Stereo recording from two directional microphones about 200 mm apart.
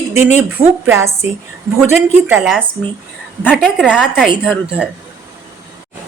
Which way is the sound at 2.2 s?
5° right (ahead or behind).